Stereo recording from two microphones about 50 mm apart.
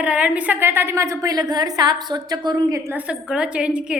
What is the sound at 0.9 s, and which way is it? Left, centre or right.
Speech, right.